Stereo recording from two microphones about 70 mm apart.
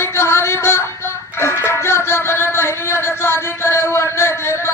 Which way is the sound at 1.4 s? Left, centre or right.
Left.